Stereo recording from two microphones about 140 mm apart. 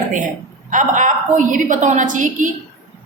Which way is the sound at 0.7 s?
65° right (ahead or behind).